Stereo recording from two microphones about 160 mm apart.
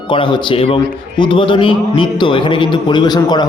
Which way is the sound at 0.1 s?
30° left (ahead or behind).